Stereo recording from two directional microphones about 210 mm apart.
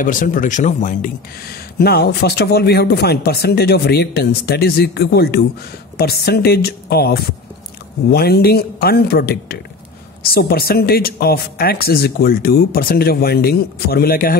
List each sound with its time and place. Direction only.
0.0 s speech: 40° left (ahead or behind)
1.8 s speech: 50° left (ahead or behind)